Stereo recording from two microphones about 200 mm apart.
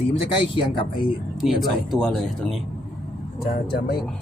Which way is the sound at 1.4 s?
Centre (ahead or behind).